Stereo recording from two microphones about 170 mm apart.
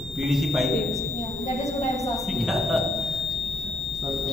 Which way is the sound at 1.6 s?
20° left (ahead or behind).